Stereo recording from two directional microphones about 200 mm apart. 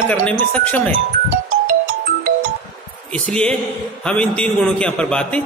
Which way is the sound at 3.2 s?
5° left (ahead or behind).